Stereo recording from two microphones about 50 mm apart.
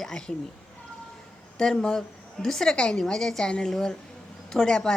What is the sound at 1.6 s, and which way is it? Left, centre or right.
A woman's voice, centre.